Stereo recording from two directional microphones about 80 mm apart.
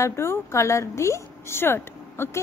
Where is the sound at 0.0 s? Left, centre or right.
Left.